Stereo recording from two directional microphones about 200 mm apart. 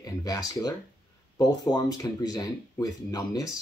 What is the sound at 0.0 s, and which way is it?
Speech, 20° left (ahead or behind).